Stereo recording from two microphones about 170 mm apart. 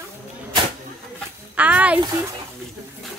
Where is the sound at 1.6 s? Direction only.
10° right (ahead or behind).